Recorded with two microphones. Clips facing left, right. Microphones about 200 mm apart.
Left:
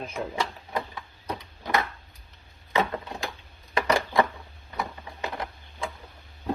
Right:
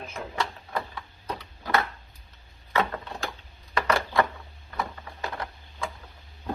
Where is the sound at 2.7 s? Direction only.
15° left (ahead or behind).